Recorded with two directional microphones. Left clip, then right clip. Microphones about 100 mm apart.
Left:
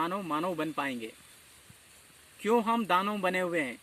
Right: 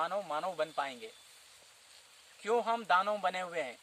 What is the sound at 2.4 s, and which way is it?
Speech, 35° right (ahead or behind).